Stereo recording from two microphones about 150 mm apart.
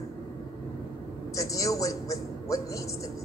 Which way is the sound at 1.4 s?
20° left (ahead or behind).